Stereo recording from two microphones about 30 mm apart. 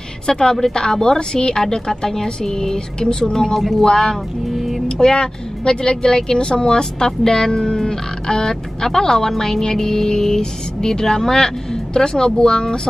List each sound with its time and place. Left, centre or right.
0.3 s speech: left
3.1 s a woman's voice: left
4.5 s music: centre
5.0 s speech: left